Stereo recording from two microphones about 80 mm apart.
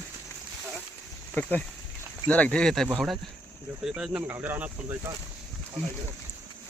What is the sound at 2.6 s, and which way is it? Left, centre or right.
Speech, centre.